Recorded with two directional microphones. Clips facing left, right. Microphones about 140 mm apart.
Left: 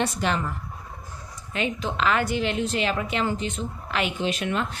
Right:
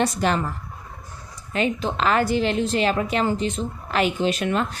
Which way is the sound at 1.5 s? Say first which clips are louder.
Right 4 dB; 40° right (ahead or behind).